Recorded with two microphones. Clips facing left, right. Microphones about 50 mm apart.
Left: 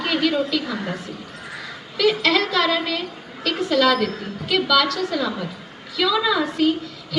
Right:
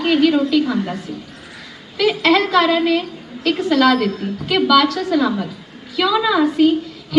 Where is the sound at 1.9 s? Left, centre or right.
Centre.